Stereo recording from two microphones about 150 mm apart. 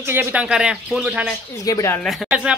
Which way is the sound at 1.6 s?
20° left (ahead or behind).